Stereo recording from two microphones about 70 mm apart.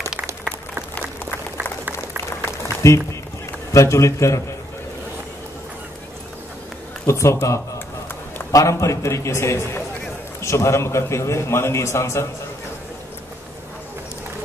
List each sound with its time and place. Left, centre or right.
2.6 s a sound: left
3.7 s a man's voice: left
7.1 s a man's voice: left